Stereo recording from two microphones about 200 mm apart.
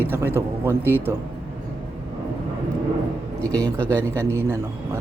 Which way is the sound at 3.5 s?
15° right (ahead or behind).